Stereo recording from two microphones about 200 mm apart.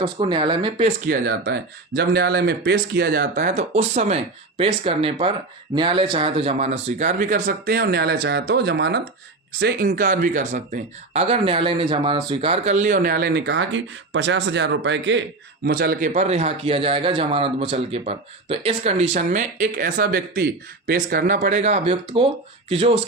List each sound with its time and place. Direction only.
0.0 s speech: 25° right (ahead or behind)
1.0 s speech: 50° right (ahead or behind)
3.7 s a man's voice: 30° right (ahead or behind)
11.1 s speech: 30° right (ahead or behind); by 15.2 s 65° right (ahead or behind)
15.6 s a man's voice: 50° right (ahead or behind); by 23.0 s 30° right (ahead or behind)